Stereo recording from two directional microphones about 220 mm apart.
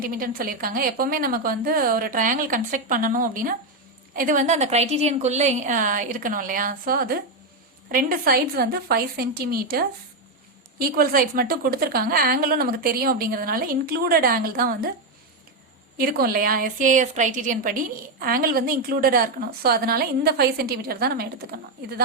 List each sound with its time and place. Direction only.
0.0 s a woman's voice: 40° right (ahead or behind)
16.0 s a woman's voice: 40° right (ahead or behind)